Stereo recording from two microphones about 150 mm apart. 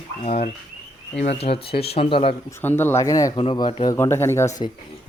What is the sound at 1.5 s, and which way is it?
Speech, 90° left.